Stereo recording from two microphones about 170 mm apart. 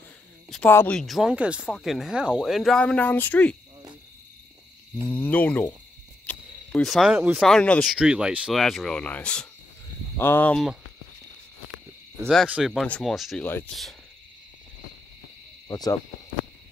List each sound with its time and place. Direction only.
0.5 s speech: 10° left (ahead or behind)
5.1 s speech: 10° left (ahead or behind)
6.2 s cricket: 5° left (ahead or behind)
7.3 s speech: 5° left (ahead or behind)
12.3 s speech: 5° right (ahead or behind)
13.4 s speech: 10° left (ahead or behind)
15.7 s hoot: 20° left (ahead or behind)